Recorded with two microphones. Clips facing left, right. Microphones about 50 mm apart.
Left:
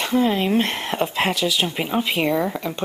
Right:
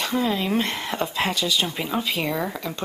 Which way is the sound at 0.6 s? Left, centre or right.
Left.